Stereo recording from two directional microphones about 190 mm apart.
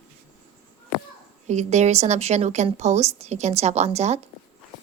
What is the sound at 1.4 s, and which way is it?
A woman's voice, 35° right (ahead or behind).